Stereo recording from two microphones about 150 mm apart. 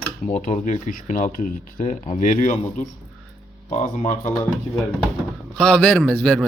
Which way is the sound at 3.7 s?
55° left (ahead or behind).